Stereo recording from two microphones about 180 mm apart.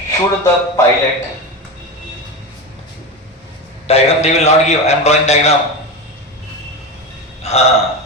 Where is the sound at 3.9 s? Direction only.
35° left (ahead or behind).